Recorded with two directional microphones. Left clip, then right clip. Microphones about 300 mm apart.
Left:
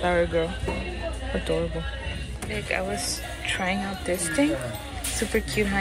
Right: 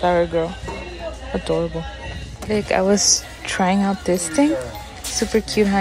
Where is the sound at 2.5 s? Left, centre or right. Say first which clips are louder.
Right 10 dB; centre.